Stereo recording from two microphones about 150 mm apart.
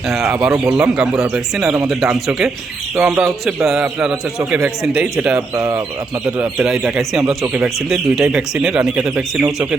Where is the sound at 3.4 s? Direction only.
Centre (ahead or behind).